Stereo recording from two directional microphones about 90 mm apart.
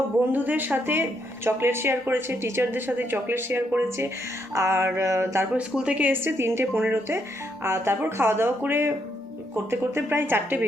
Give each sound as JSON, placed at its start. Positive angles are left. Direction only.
{"t": 0.3, "sound": "speech", "side_deg": -20}
{"t": 5.5, "sound": "speech", "side_deg": -10}